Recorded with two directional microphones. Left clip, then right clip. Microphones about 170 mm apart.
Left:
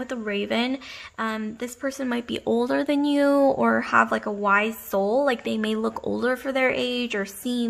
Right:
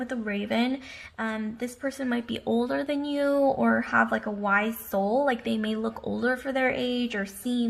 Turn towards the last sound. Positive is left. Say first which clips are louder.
# left 3 dB
turn(degrees=25)  # may be behind; listen again after turning